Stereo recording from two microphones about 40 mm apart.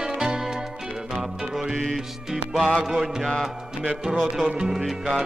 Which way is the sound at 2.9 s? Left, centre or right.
Centre.